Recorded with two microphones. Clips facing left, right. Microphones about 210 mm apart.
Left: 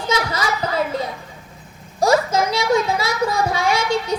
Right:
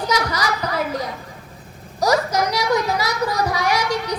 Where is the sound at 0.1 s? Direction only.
25° left (ahead or behind).